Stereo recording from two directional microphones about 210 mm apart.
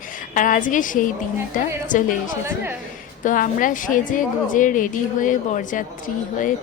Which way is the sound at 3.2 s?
40° left (ahead or behind).